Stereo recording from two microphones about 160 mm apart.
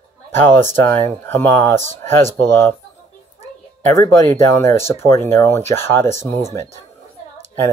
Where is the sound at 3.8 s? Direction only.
15° left (ahead or behind).